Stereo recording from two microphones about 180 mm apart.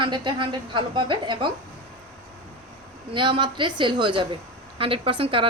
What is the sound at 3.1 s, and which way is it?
A woman's voice, 25° right (ahead or behind).